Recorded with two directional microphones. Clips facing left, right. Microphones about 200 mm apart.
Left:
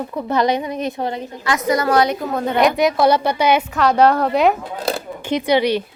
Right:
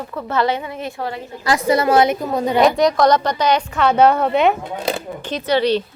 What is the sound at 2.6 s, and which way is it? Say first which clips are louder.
A woman's voice: right 1 dB; centre (ahead or behind).